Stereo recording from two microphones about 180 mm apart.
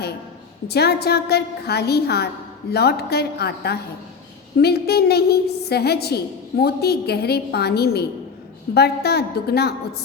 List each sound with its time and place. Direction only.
0.7 s a woman's voice: 65° left (ahead or behind)